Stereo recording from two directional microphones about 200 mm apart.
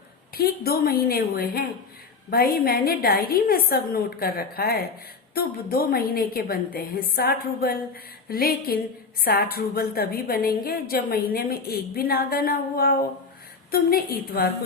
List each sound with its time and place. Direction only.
0.3 s a woman's voice: 50° left (ahead or behind)